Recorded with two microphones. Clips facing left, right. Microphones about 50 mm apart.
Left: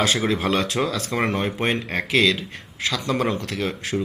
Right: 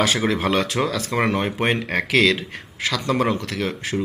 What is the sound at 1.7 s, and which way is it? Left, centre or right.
Speech, right.